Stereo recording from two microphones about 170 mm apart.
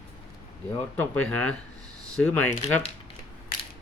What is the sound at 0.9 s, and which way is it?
Speech, 10° left (ahead or behind).